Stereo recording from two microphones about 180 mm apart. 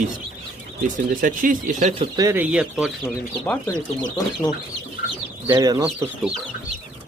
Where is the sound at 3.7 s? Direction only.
20° left (ahead or behind).